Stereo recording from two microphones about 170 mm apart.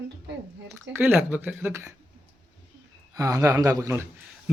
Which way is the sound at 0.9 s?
10° right (ahead or behind).